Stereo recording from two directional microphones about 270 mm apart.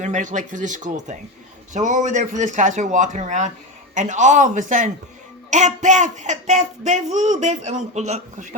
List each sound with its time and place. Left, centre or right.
0.0 s speech: right